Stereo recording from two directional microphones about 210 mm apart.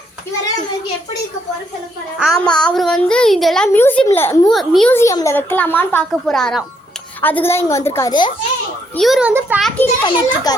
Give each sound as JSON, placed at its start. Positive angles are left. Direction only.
{"t": 2.1, "sound": "a child's voice", "side_deg": 0}
{"t": 9.0, "sound": "a child's voice", "side_deg": 0}
{"t": 10.0, "sound": "a child's voice", "side_deg": 20}